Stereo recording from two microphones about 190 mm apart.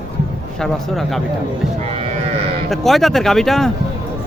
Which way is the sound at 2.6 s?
Centre (ahead or behind).